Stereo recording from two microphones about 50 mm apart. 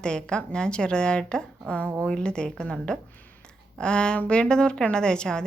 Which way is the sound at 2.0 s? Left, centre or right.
Centre.